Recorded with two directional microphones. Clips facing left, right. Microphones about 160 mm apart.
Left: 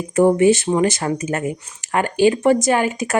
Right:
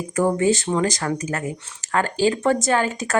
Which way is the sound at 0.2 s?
20° left (ahead or behind).